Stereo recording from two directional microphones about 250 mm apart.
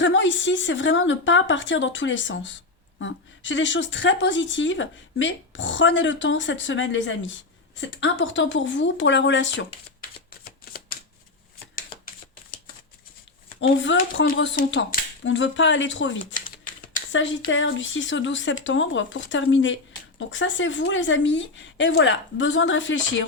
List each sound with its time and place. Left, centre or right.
0.0 s a woman's voice: left
11.7 s typewriter: left
13.6 s speech: left